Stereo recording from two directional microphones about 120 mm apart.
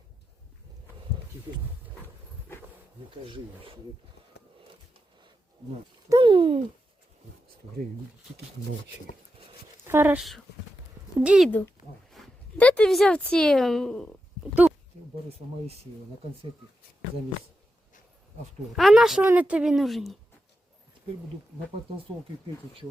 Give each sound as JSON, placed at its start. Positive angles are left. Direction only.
{"t": 3.2, "sound": "speech", "side_deg": -45}
{"t": 6.1, "sound": "a sound", "side_deg": -40}
{"t": 9.8, "sound": "speech", "side_deg": -20}
{"t": 10.2, "sound": "speech", "side_deg": 0}
{"t": 11.4, "sound": "speech", "side_deg": 15}
{"t": 12.2, "sound": "a sound", "side_deg": 0}
{"t": 12.5, "sound": "speech", "side_deg": 10}
{"t": 14.6, "sound": "a sound", "side_deg": -15}
{"t": 18.8, "sound": "speech", "side_deg": 0}
{"t": 19.2, "sound": "speech", "side_deg": -15}